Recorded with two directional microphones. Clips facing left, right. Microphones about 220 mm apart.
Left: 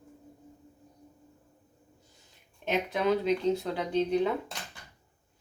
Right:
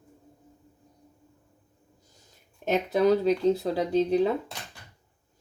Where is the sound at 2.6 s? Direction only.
40° right (ahead or behind).